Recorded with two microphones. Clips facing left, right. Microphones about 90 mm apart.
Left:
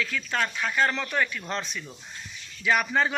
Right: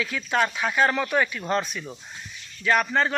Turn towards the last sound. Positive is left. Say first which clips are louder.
# right 2 dB
turn(degrees=5)  # may be behind; listen again after turning